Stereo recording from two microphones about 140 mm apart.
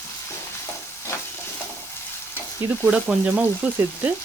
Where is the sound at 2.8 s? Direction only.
10° right (ahead or behind).